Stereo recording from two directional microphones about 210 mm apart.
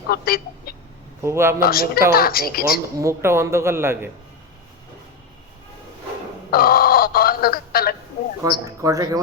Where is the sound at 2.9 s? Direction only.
15° right (ahead or behind).